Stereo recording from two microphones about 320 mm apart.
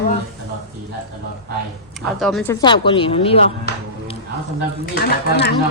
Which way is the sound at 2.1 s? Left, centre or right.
Centre.